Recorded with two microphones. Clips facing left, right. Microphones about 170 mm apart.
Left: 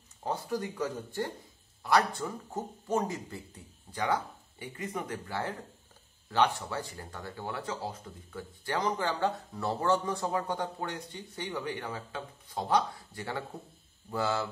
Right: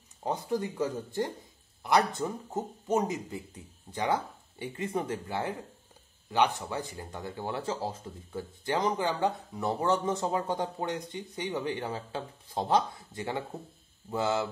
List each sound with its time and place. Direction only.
0.2 s speech: 20° right (ahead or behind)